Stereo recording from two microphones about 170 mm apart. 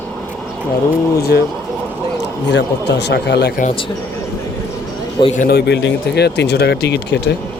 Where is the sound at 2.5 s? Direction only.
80° left.